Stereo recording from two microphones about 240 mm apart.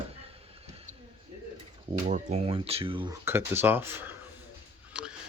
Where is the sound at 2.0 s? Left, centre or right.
Right.